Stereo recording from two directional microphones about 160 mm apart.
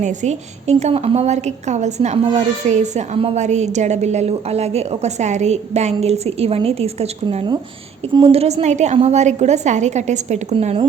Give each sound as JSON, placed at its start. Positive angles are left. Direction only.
{"t": 0.0, "sound": "a woman's voice", "side_deg": -45}